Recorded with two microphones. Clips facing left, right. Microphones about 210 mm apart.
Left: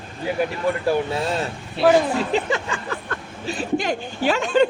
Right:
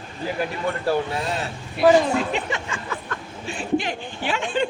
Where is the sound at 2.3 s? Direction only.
35° left (ahead or behind).